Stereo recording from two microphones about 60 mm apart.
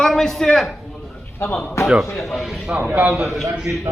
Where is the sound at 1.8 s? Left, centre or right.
Left.